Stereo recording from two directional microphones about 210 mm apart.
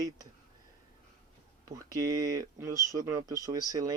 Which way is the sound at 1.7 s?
15° right (ahead or behind).